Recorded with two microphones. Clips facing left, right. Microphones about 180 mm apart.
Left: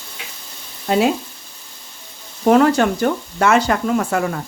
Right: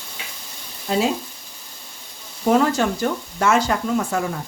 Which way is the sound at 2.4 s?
65° left (ahead or behind).